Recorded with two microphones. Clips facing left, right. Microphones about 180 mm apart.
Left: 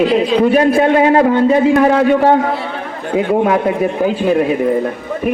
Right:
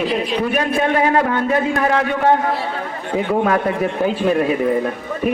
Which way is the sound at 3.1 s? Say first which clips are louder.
Left 4 dB; 15° left (ahead or behind).